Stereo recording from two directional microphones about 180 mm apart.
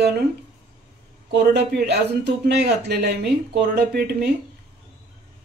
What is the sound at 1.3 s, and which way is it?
Speech, 70° right (ahead or behind).